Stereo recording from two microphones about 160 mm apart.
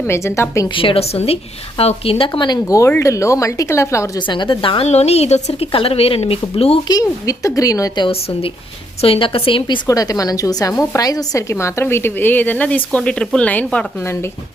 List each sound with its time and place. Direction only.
0.1 s a woman's voice: 15° left (ahead or behind)
0.8 s a woman's voice: 35° left (ahead or behind); by 4.1 s 20° left (ahead or behind)
4.3 s a woman's voice: 30° left (ahead or behind)
6.8 s a woman's voice: 20° left (ahead or behind)